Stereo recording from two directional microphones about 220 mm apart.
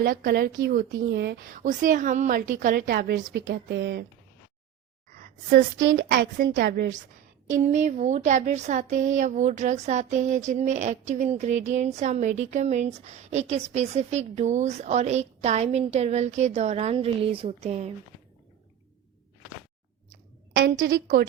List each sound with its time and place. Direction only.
0.0 s speech: 40° right (ahead or behind)
5.2 s a sound: 40° right (ahead or behind)
5.8 s a woman's voice: 60° right (ahead or behind)
7.4 s speech: 35° right (ahead or behind)
20.6 s a woman's voice: 60° right (ahead or behind)